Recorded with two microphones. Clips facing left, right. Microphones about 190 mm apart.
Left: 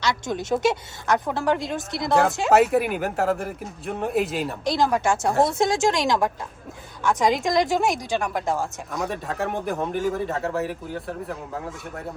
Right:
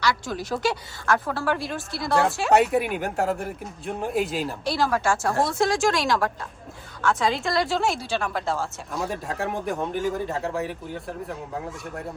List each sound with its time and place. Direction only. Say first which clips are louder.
0.0 s a woman's voice: even; 20° left (ahead or behind)
2.5 s speech: left 2 dB; centre (ahead or behind)
4.6 s a woman's voice: left 3 dB; 15° left (ahead or behind)
9.0 s speech: left 1 dB; centre (ahead or behind)